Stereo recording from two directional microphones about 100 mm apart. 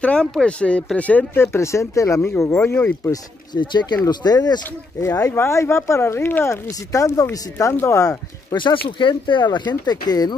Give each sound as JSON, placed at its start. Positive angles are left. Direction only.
{"t": 0.0, "sound": "speech", "side_deg": 10}
{"t": 3.1, "sound": "speech", "side_deg": 45}
{"t": 5.0, "sound": "speech", "side_deg": 30}
{"t": 8.5, "sound": "speech", "side_deg": 55}